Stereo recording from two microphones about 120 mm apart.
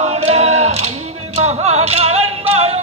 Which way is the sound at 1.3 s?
65° right (ahead or behind).